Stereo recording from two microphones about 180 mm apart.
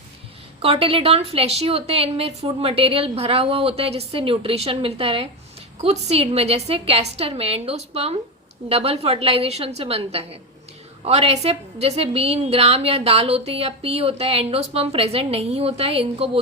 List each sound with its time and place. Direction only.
0.6 s a woman's voice: 30° right (ahead or behind)